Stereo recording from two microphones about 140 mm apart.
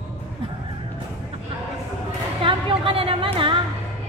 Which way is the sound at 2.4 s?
40° right (ahead or behind).